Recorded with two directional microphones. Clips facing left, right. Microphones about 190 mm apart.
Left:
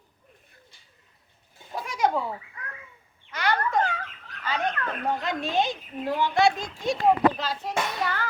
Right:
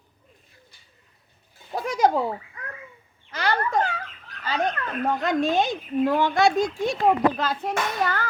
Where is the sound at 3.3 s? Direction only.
30° right (ahead or behind).